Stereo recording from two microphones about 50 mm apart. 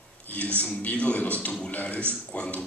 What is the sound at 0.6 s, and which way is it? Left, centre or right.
A man's voice, left.